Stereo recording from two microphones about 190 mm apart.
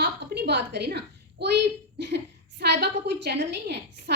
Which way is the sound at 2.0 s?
65° right (ahead or behind).